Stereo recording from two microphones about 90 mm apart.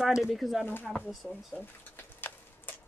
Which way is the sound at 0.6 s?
25° left (ahead or behind).